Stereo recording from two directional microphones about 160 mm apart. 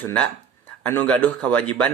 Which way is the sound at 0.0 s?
10° left (ahead or behind).